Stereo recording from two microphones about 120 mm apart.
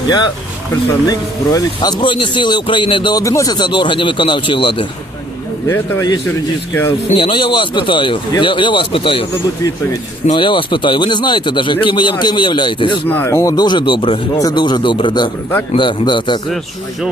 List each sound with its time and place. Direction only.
1.0 s a man's voice: 35° left (ahead or behind)
5.6 s a man's voice: 20° left (ahead or behind)
7.1 s speech: 45° left (ahead or behind)
10.3 s speech: 45° left (ahead or behind)
13.1 s a man's voice: 15° left (ahead or behind); by 16.4 s 40° left (ahead or behind)